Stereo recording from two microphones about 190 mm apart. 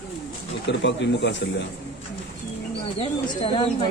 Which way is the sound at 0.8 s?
70° left (ahead or behind).